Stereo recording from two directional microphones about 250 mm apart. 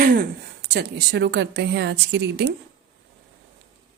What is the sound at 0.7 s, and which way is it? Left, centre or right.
A woman's voice, right.